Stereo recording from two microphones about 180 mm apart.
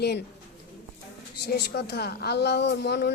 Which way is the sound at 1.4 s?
65° left (ahead or behind).